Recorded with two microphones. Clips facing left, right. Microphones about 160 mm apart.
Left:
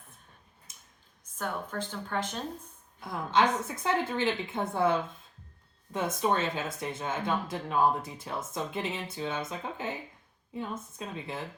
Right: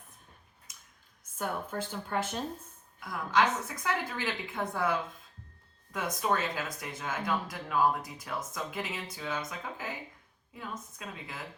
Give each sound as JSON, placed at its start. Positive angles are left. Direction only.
{"t": 1.4, "sound": "speech", "side_deg": -10}
{"t": 3.0, "sound": "speech", "side_deg": 25}